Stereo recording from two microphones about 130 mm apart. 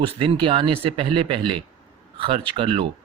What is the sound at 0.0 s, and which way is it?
Speech, 45° right (ahead or behind).